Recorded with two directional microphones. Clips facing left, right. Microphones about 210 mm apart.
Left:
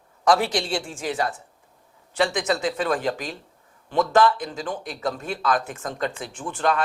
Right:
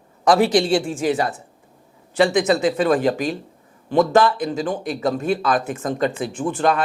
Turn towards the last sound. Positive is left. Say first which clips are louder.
# right 4 dB
turn(degrees=-10)  # may be behind; listen again after turning